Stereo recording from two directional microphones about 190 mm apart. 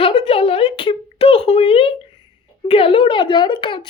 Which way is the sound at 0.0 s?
30° left (ahead or behind).